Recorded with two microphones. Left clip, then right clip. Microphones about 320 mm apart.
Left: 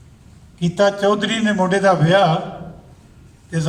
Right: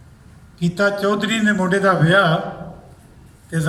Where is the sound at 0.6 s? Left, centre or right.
Centre.